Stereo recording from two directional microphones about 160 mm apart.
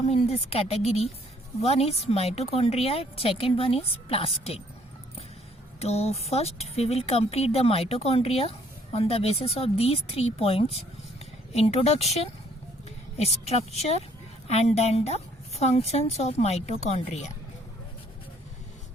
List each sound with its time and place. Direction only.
0.1 s speech: 40° left (ahead or behind)
5.8 s speech: 40° left (ahead or behind)